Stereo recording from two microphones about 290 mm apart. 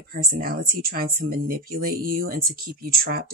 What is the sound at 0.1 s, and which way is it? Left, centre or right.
Speech, right.